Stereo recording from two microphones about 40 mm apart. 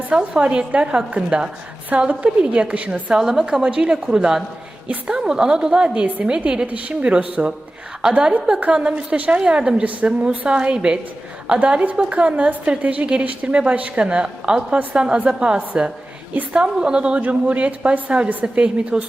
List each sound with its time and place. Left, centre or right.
0.1 s a woman's voice: right
3.2 s a woman's voice: centre
3.7 s a woman's voice: right
6.7 s a woman's voice: right
8.2 s a woman's voice: right
9.8 s a woman's voice: right
10.1 s a woman's voice: right
17.2 s a woman's voice: right